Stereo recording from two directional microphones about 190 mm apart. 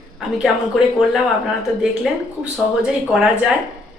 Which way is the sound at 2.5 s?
5° right (ahead or behind).